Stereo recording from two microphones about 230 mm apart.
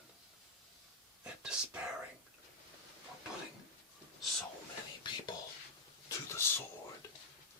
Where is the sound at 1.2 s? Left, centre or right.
Centre.